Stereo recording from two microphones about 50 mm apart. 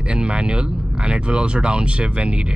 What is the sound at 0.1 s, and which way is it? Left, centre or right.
Speech, right.